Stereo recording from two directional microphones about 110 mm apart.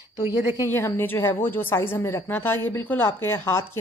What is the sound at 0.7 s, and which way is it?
Speech, 20° left (ahead or behind).